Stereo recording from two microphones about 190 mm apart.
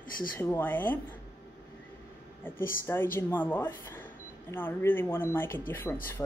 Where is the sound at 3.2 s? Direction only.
10° left (ahead or behind).